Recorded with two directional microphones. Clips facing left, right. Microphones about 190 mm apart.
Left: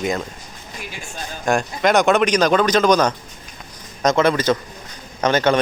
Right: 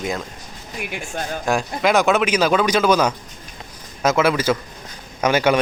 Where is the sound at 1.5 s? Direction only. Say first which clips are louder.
Left 2 dB; 5° right (ahead or behind).